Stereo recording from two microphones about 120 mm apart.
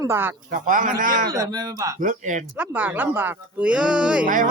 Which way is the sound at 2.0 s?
90° right.